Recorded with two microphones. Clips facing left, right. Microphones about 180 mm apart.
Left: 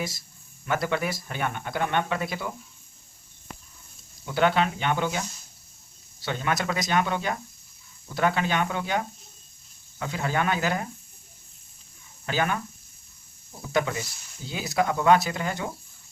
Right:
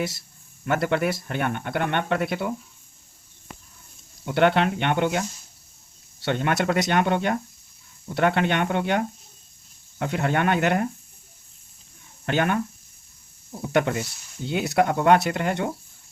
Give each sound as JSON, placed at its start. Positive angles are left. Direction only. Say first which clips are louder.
{"t": 0.0, "sound": "speech", "louder": "right 4 dB", "side_deg": -65}
{"t": 4.3, "sound": "speech", "louder": "right 3 dB", "side_deg": -60}
{"t": 12.2, "sound": "speech", "louder": "right 4 dB", "side_deg": -60}
{"t": 13.7, "sound": "speech", "louder": "right 4 dB", "side_deg": -60}